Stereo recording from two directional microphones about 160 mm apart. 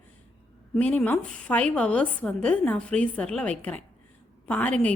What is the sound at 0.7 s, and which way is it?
A woman's voice, 5° left (ahead or behind).